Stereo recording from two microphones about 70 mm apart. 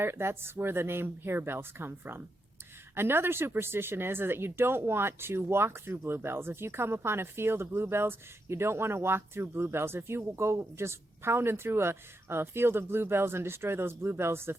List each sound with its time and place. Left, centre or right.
0.0 s speech: right